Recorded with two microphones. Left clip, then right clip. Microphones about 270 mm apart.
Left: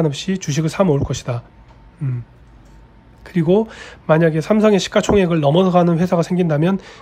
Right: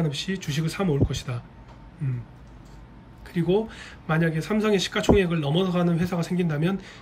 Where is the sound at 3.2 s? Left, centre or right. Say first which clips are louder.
Left 8 dB; centre.